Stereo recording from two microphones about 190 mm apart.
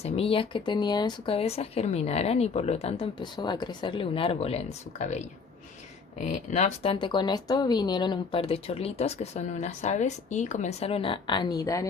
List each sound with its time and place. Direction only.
0.0 s speech: 30° left (ahead or behind)